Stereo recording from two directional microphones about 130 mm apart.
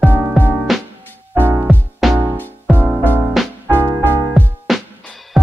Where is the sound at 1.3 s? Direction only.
15° right (ahead or behind).